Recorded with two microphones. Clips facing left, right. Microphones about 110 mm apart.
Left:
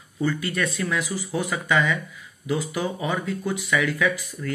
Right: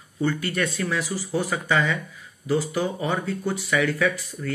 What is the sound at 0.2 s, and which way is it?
Speech, 30° right (ahead or behind).